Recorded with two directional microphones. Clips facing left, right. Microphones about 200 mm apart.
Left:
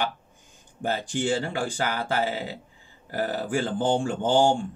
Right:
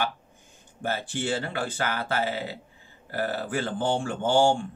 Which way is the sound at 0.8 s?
15° left (ahead or behind).